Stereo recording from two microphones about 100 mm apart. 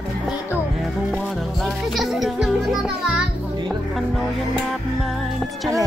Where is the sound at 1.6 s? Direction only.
Centre (ahead or behind).